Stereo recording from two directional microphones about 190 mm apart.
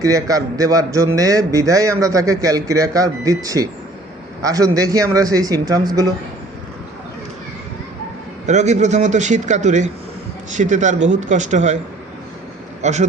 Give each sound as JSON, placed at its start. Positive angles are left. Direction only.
{"t": 0.0, "sound": "a man's voice", "side_deg": -20}
{"t": 8.4, "sound": "a man's voice", "side_deg": -35}
{"t": 12.8, "sound": "speech", "side_deg": -35}